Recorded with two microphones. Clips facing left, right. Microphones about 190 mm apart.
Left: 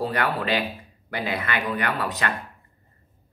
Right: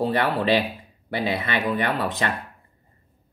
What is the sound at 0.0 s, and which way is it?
Speech, 25° right (ahead or behind).